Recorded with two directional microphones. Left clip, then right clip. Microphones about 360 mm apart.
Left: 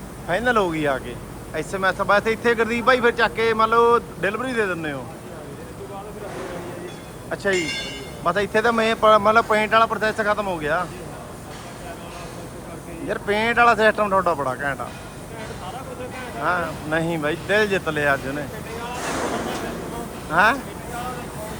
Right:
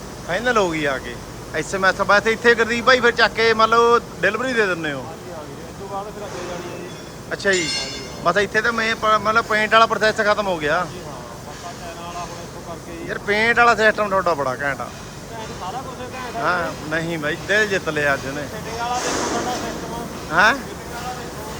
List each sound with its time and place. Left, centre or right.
0.3 s a man's voice: centre
7.3 s a man's voice: centre
13.1 s a man's voice: centre
16.4 s a man's voice: centre
20.3 s a man's voice: centre